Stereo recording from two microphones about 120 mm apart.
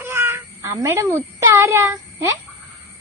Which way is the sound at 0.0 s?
20° right (ahead or behind).